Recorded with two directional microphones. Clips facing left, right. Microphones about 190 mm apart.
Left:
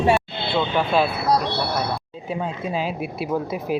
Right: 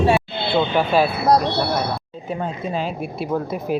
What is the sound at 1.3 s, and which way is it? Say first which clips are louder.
Speech: right 5 dB; 50° right (ahead or behind).